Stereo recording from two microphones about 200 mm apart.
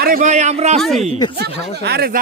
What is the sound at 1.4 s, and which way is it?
Speech, 55° right (ahead or behind).